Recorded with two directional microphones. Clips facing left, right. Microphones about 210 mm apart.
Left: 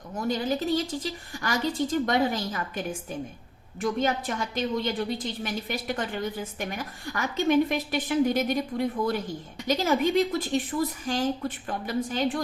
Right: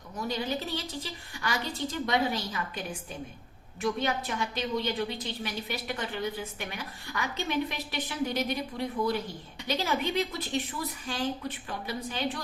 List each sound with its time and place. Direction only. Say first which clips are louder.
0.3 s a woman's voice: left 6 dB; 45° left (ahead or behind)